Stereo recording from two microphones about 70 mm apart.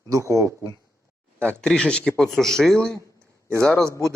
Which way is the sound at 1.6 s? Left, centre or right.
Centre.